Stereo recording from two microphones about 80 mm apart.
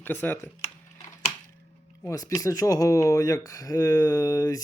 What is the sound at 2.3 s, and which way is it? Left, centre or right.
Speech, left.